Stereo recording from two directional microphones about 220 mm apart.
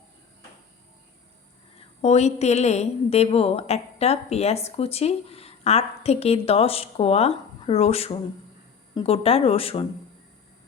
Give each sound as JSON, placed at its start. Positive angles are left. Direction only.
{"t": 2.0, "sound": "a woman's voice", "side_deg": 30}